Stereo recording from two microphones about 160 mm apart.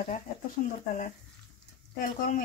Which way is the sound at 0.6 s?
60° left (ahead or behind).